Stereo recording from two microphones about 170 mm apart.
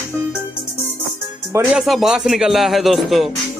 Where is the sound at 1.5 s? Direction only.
10° right (ahead or behind).